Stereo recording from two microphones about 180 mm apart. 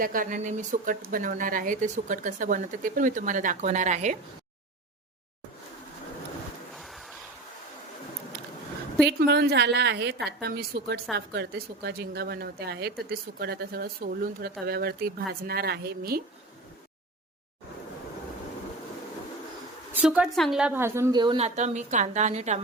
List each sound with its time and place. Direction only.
0.0 s speech: 50° right (ahead or behind)
6.7 s a sound: centre (ahead or behind)
9.0 s a woman's voice: 65° right (ahead or behind)
19.9 s a woman's voice: 5° right (ahead or behind); by 22.6 s 40° right (ahead or behind)